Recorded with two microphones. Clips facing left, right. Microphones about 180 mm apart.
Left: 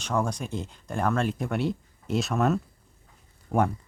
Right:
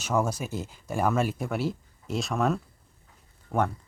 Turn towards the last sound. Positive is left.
turn(degrees=15)  # may be behind; listen again after turning